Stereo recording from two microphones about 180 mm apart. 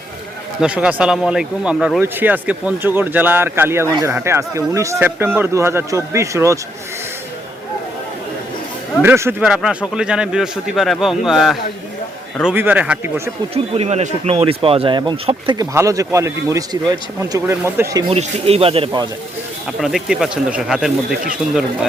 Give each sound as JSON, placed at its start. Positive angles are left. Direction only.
{"t": 0.6, "sound": "speech", "side_deg": -5}
{"t": 9.0, "sound": "speech", "side_deg": -15}
{"t": 13.5, "sound": "speech", "side_deg": -35}
{"t": 15.7, "sound": "speech", "side_deg": -15}
{"t": 18.1, "sound": "speech", "side_deg": -35}
{"t": 19.8, "sound": "speech", "side_deg": 0}